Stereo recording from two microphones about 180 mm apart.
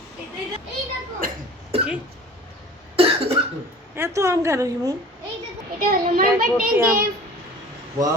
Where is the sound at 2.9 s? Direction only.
30° right (ahead or behind).